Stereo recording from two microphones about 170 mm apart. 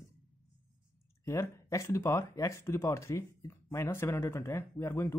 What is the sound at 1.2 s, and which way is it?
Speech, 15° left (ahead or behind).